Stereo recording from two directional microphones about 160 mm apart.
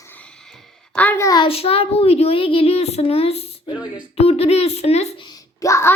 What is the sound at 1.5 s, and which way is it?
Speech, 40° left (ahead or behind).